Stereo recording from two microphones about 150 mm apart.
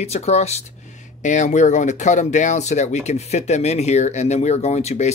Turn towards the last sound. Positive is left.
turn(degrees=45)  # may be behind; listen again after turning